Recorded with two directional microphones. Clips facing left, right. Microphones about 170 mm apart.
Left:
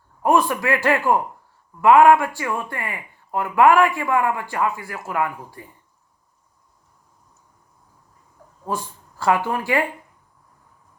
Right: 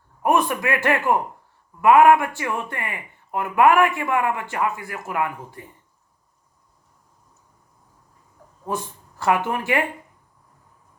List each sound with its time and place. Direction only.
0.2 s speech: 20° right (ahead or behind)
8.6 s speech: 20° right (ahead or behind)